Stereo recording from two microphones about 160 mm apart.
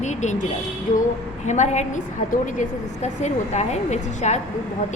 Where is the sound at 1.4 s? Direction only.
50° left (ahead or behind).